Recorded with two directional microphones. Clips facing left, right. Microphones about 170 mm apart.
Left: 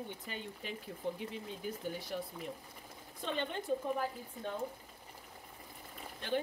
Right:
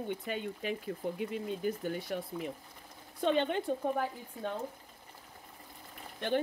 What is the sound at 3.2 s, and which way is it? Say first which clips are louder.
Speech: right 8 dB; 70° right (ahead or behind).